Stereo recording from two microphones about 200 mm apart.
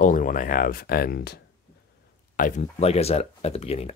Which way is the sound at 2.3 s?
40° left (ahead or behind).